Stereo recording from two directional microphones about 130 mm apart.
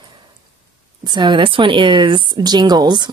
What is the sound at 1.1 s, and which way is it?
Speech, 35° right (ahead or behind).